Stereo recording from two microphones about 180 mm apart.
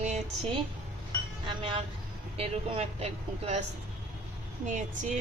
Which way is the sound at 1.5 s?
25° right (ahead or behind).